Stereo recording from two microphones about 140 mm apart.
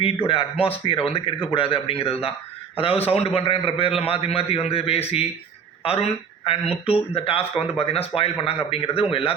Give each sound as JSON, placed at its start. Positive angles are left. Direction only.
{"t": 0.3, "sound": "speech", "side_deg": 40}